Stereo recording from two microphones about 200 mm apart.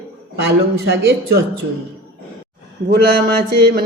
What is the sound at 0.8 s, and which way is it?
Speech, 50° right (ahead or behind).